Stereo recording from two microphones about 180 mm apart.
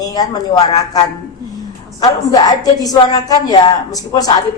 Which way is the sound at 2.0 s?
20° left (ahead or behind).